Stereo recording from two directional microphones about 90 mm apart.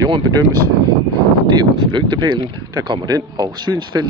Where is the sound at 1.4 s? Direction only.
60° right (ahead or behind).